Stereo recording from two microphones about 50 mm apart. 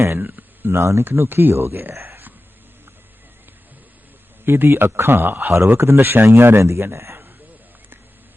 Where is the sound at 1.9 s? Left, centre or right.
Right.